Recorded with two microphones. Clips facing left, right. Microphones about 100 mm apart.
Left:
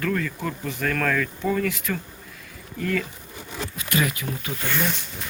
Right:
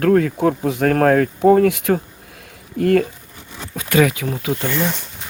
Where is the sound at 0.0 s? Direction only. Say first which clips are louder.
Right 12 dB; 70° right (ahead or behind).